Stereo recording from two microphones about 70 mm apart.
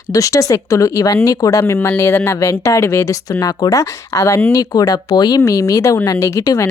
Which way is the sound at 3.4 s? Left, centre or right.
Left.